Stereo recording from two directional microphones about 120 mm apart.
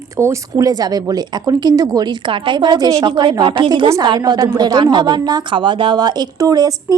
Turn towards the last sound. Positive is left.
turn(degrees=-30)  # may be behind; listen again after turning